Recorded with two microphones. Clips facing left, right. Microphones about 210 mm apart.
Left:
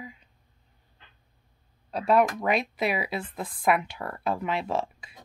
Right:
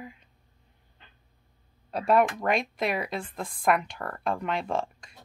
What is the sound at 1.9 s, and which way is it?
Speech, centre (ahead or behind).